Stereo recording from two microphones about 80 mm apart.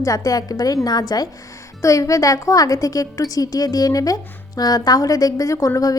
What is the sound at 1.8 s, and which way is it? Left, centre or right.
A woman's voice, left.